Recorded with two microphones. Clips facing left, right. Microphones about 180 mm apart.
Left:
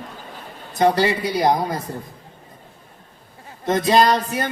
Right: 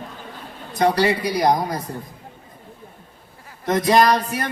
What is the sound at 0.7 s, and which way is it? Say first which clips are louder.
A man's voice: left 1 dB; 25° left (ahead or behind).